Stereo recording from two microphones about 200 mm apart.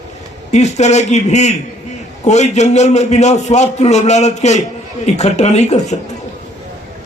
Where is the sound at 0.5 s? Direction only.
35° left (ahead or behind).